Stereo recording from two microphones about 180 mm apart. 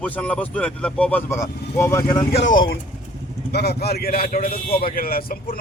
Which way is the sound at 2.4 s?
85° left.